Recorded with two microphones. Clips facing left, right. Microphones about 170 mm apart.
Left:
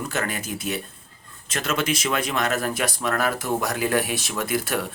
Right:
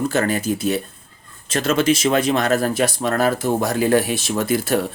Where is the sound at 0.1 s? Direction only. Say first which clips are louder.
Right 8 dB; 30° right (ahead or behind).